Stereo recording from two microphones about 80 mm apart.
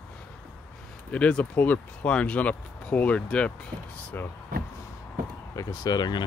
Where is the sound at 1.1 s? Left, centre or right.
Centre.